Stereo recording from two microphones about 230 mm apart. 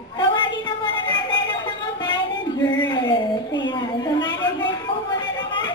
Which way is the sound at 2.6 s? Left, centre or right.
Centre.